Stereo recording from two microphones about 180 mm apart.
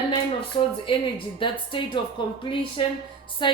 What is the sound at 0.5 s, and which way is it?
Speech, 30° left (ahead or behind).